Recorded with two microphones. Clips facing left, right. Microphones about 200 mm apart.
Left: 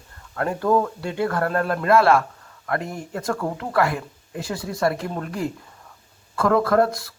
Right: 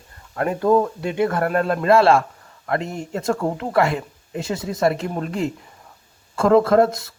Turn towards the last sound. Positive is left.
turn(degrees=-20)  # may be behind; listen again after turning